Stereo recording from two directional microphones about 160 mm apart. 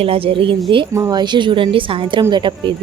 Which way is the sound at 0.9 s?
20° right (ahead or behind).